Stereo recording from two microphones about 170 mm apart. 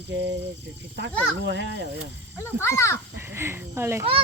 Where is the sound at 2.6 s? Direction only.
15° left (ahead or behind).